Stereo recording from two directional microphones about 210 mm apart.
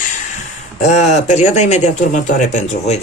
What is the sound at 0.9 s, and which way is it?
Speech, 35° left (ahead or behind).